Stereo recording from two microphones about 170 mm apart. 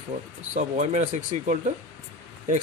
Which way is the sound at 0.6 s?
45° right (ahead or behind).